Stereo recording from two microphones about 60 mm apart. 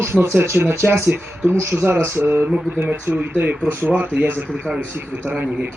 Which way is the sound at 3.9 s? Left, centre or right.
Right.